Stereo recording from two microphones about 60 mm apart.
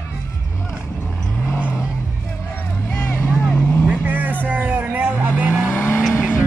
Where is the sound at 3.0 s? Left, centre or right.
Left.